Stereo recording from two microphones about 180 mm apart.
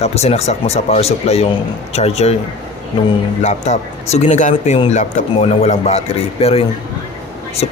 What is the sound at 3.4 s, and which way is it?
A man's voice, 40° left (ahead or behind).